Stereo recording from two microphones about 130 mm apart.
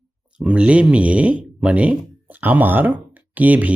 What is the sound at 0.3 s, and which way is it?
Speech, 10° right (ahead or behind).